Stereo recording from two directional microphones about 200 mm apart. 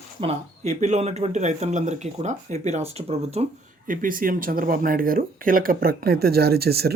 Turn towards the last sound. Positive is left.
turn(degrees=-50)  # may be behind; listen again after turning